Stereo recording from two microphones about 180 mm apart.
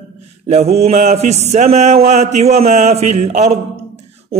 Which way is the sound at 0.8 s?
35° right (ahead or behind).